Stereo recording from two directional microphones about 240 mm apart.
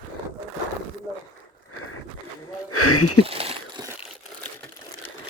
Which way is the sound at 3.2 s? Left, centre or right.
Right.